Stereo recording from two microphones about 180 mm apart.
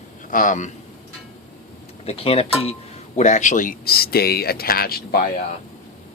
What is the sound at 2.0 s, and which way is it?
Speech, 30° left (ahead or behind).